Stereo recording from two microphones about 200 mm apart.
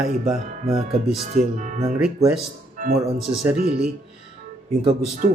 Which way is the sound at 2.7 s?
40° right (ahead or behind).